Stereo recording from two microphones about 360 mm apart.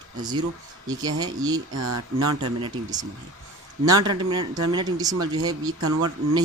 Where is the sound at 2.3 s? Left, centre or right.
Centre.